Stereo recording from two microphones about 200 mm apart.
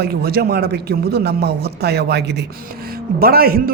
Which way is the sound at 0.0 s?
50° right (ahead or behind).